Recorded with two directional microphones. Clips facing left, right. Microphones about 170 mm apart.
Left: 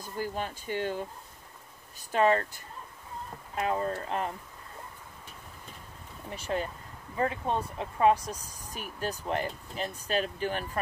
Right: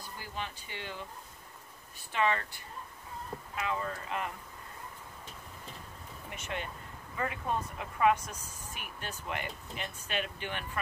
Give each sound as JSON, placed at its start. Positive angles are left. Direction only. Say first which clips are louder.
{"t": 0.0, "sound": "speech", "louder": "left 7 dB", "side_deg": 45}
{"t": 2.1, "sound": "speech", "louder": "left 6 dB", "side_deg": 40}
{"t": 6.3, "sound": "speech", "louder": "left 7 dB", "side_deg": 35}